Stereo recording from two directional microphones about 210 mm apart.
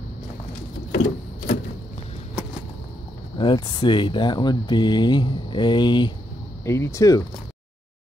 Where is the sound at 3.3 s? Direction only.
20° left (ahead or behind).